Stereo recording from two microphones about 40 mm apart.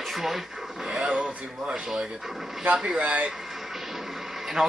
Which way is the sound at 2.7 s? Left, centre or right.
Right.